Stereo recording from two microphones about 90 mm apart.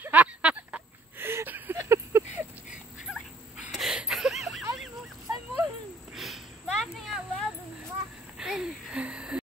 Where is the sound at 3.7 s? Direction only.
5° right (ahead or behind).